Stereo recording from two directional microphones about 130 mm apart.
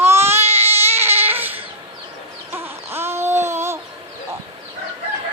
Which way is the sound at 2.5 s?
15° right (ahead or behind).